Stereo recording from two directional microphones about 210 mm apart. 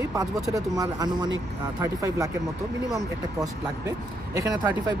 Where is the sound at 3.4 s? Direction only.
15° right (ahead or behind).